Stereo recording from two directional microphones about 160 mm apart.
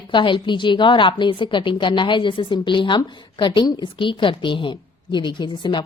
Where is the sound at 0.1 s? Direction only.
30° left (ahead or behind).